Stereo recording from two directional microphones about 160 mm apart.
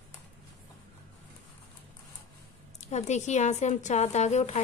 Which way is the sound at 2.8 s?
45° left (ahead or behind).